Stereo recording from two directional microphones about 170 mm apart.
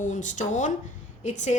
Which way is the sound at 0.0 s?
45° left (ahead or behind).